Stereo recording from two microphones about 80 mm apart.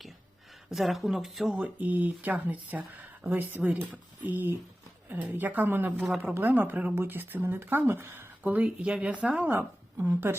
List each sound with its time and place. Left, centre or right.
0.7 s speech: centre
1.5 s a woman's voice: centre